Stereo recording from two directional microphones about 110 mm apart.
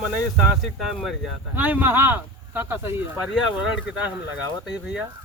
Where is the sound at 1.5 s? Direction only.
15° right (ahead or behind).